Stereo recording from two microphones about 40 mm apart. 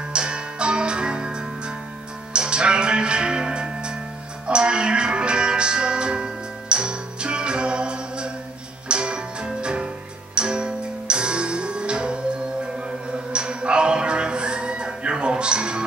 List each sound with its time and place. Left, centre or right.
0.1 s music: right